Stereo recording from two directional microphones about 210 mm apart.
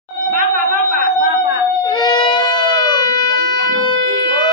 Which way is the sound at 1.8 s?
20° left (ahead or behind).